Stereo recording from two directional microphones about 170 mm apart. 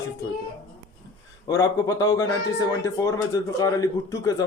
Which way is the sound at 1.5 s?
20° left (ahead or behind).